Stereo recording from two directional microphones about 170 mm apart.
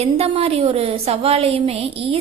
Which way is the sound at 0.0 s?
35° right (ahead or behind).